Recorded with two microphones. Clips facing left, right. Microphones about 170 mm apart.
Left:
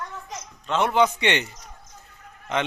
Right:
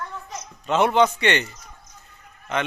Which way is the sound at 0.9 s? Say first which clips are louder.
Right 2 dB; 15° left (ahead or behind).